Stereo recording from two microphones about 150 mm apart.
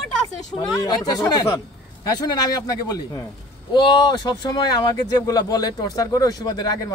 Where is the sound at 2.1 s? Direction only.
25° left (ahead or behind).